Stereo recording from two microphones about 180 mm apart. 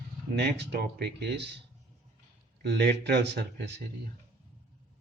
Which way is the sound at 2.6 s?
70° right (ahead or behind).